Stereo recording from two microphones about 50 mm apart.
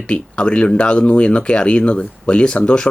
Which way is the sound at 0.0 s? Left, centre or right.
Centre.